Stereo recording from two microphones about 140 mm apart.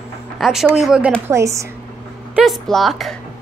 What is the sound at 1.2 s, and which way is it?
Speech, 20° right (ahead or behind).